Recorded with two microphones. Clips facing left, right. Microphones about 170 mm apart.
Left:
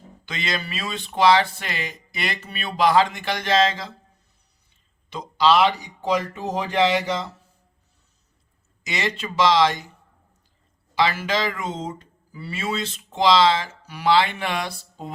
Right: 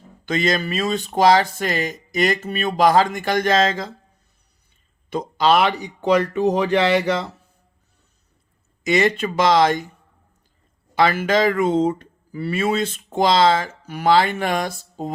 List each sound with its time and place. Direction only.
0.3 s speech: 45° right (ahead or behind)
5.0 s speech: 50° right (ahead or behind)
8.8 s speech: 50° right (ahead or behind)
10.9 s speech: 50° right (ahead or behind)